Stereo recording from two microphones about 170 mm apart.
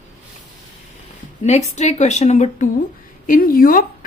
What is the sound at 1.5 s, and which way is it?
A woman's voice, 40° left (ahead or behind).